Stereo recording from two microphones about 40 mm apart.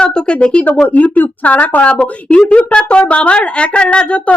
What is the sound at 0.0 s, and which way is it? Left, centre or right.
A woman's voice, left.